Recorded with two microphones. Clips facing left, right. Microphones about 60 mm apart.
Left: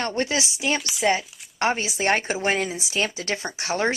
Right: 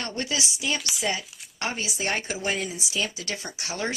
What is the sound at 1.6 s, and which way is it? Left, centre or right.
Speech, left.